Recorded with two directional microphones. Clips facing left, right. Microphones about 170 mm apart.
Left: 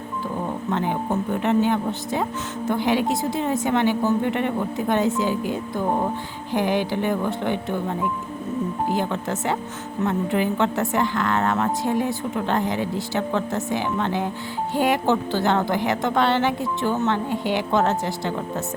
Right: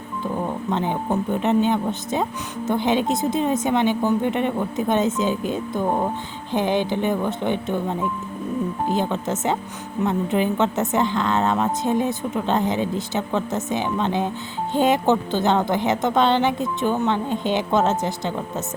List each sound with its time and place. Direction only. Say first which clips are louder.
0.7 s a woman's voice: even; 20° right (ahead or behind)